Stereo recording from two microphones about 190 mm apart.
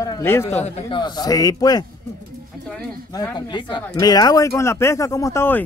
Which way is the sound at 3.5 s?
25° left (ahead or behind).